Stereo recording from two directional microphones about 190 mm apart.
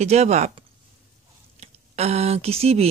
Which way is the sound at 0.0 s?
35° right (ahead or behind).